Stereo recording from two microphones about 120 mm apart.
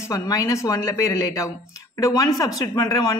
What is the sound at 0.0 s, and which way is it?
A man's voice, 30° left (ahead or behind).